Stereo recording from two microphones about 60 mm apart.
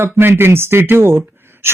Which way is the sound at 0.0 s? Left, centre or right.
Right.